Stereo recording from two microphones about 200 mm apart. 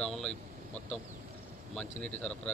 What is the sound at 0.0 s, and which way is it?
Vehicle, centre (ahead or behind).